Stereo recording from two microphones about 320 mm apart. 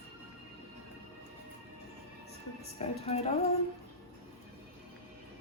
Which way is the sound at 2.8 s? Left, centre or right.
Centre.